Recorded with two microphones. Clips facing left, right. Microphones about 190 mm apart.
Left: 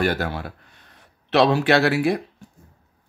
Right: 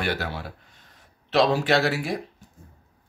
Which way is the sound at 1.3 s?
65° left (ahead or behind).